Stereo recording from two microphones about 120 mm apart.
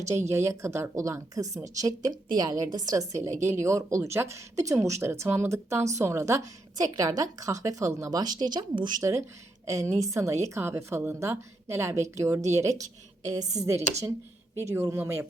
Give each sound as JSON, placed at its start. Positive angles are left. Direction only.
{"t": 0.1, "sound": "a woman's voice", "side_deg": -20}